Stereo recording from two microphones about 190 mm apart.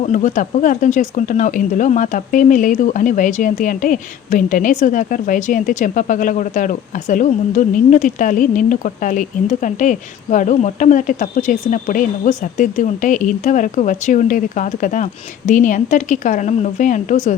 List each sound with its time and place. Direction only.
0.1 s a woman's voice: 40° left (ahead or behind)